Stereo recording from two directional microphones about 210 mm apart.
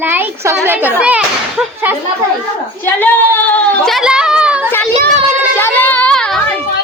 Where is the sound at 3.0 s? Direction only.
10° left (ahead or behind).